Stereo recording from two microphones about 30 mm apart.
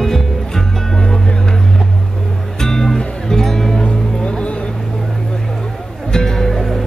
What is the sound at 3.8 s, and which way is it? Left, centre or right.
Music, left.